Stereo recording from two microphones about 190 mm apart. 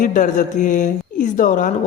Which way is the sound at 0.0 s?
40° left (ahead or behind).